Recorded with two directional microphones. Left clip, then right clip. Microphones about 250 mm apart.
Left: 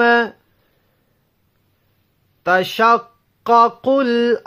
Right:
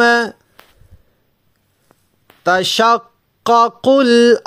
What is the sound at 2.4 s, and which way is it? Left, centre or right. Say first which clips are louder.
Speech: right 2 dB; right.